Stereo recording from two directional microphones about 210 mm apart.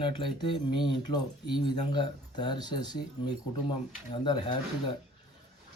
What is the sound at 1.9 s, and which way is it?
Speech, 20° left (ahead or behind).